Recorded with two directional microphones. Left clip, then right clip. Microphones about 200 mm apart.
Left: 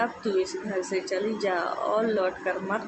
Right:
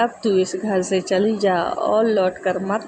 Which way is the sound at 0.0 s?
30° right (ahead or behind).